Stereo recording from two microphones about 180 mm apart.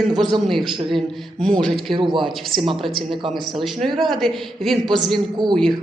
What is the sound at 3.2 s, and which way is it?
A woman's voice, centre (ahead or behind).